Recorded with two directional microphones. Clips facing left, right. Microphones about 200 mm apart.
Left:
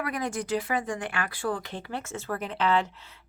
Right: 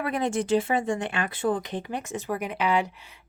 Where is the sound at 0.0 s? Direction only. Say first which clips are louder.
Right 4 dB; 25° right (ahead or behind).